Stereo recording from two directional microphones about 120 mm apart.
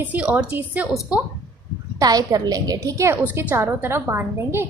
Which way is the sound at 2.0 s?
30° right (ahead or behind).